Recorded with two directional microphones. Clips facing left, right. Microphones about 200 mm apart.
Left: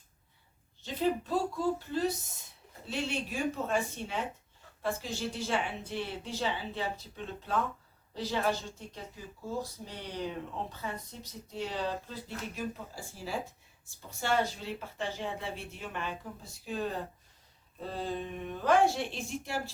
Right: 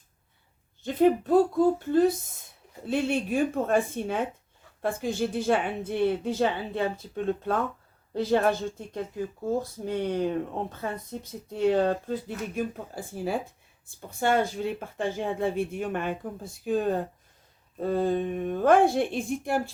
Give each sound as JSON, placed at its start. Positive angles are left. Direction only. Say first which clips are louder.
{"t": 0.8, "sound": "speech", "louder": "right 9 dB", "side_deg": -55}